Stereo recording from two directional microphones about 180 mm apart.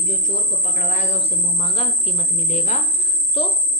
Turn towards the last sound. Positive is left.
turn(degrees=30)  # may be behind; listen again after turning